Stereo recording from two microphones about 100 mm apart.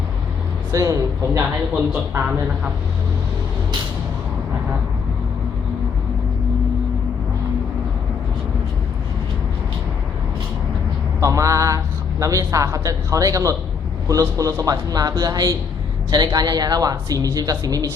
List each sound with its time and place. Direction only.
0.7 s a woman's voice: 35° right (ahead or behind)
11.2 s a woman's voice: 35° right (ahead or behind)